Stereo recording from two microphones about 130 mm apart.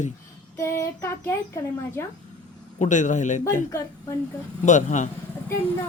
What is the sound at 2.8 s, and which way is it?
Speech, 70° left (ahead or behind).